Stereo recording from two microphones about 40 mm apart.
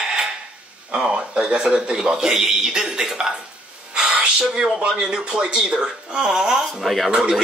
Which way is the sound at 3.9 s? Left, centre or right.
Right.